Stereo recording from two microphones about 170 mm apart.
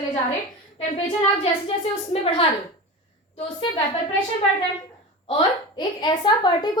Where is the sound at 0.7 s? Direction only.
40° left (ahead or behind).